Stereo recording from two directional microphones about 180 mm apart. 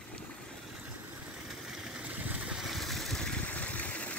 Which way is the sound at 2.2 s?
5° right (ahead or behind).